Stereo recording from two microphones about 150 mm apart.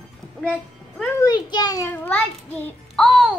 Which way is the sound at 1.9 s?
10° left (ahead or behind).